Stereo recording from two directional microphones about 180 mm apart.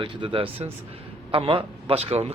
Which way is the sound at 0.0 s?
30° right (ahead or behind).